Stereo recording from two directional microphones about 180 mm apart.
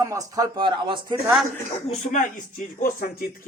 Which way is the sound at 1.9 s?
45° left (ahead or behind).